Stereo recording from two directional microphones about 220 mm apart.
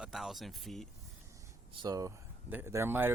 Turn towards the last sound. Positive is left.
turn(degrees=-10)  # may be behind; listen again after turning